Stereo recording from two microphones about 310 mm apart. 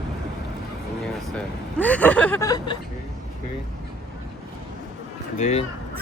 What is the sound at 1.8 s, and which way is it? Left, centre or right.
Speech, centre.